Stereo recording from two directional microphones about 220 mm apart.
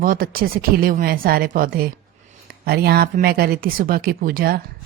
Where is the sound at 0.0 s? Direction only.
40° right (ahead or behind).